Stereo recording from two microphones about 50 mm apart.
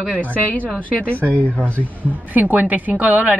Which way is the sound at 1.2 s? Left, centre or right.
Right.